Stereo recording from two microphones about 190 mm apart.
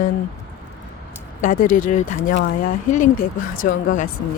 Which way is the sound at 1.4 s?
45° left (ahead or behind).